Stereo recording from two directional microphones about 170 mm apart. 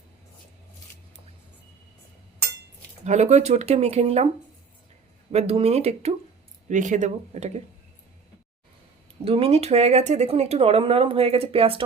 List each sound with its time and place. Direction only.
3.0 s speech: 45° right (ahead or behind)
5.3 s speech: 35° right (ahead or behind)
9.2 s speech: 35° right (ahead or behind)